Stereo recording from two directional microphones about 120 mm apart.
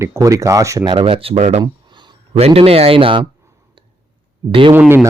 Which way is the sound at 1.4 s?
65° right (ahead or behind).